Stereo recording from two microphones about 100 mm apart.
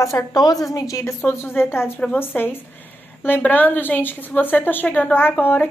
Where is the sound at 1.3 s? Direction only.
25° left (ahead or behind).